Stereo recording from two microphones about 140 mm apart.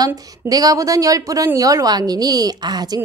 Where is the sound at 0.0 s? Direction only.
25° right (ahead or behind).